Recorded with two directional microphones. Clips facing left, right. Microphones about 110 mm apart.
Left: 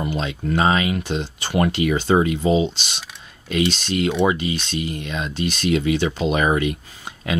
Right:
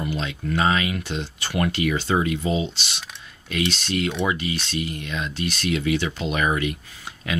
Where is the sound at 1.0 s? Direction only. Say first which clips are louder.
Left 4 dB; 20° left (ahead or behind).